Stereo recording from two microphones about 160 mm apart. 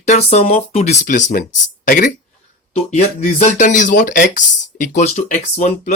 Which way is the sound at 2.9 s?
45° left (ahead or behind).